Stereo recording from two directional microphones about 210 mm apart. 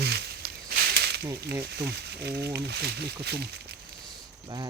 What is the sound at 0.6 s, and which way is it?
Snake, 50° right (ahead or behind).